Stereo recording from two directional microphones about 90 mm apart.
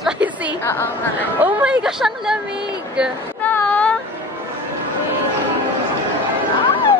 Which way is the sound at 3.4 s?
20° left (ahead or behind).